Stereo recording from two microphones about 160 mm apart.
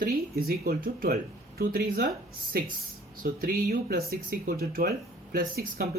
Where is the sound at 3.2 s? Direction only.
65° right (ahead or behind).